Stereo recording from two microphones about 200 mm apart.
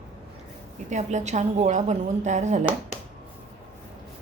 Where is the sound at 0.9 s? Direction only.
35° right (ahead or behind).